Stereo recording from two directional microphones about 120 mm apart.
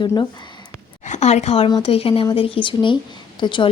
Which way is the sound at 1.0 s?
75° left (ahead or behind).